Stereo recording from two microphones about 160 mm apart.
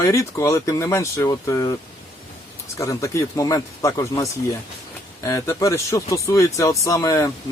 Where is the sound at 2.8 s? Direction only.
20° left (ahead or behind).